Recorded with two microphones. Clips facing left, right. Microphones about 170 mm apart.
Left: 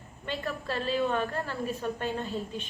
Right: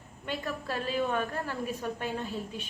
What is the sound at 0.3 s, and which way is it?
A woman's voice, 10° right (ahead or behind).